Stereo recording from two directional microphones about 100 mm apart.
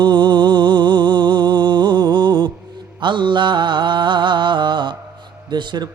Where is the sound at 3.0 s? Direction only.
50° right (ahead or behind).